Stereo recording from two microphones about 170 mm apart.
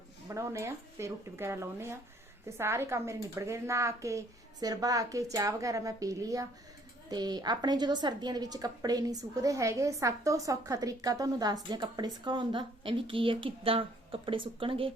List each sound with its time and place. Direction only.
0.3 s a woman's voice: 15° right (ahead or behind)